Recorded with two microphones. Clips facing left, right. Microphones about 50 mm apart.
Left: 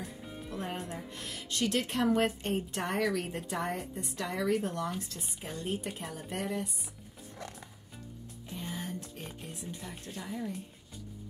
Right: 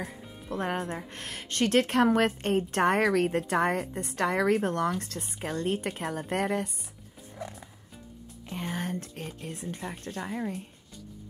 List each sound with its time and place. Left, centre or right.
0.5 s a woman's voice: right
8.5 s a woman's voice: right